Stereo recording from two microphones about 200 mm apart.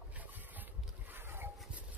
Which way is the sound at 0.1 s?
10° right (ahead or behind).